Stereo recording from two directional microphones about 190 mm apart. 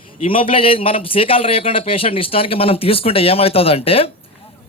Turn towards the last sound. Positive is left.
turn(degrees=30)  # may be behind; listen again after turning